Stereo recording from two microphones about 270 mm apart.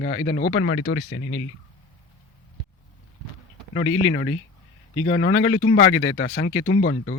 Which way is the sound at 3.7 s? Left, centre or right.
Left.